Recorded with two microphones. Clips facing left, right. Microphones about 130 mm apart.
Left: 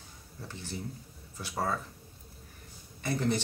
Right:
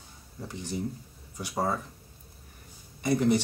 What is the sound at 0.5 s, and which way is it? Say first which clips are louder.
Speech: right 7 dB; 15° right (ahead or behind).